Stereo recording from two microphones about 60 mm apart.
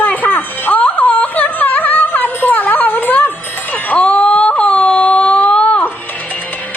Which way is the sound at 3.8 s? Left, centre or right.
Left.